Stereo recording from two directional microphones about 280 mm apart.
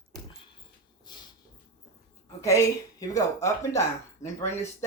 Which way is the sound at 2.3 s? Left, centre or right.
Centre.